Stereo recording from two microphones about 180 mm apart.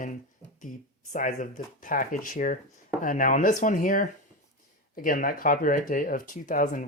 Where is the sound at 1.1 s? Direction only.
45° left (ahead or behind).